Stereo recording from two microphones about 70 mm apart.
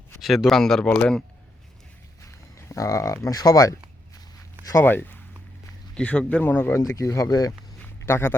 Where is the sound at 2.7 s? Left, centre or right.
Left.